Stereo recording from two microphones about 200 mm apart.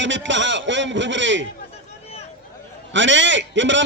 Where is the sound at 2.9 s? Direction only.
65° right (ahead or behind).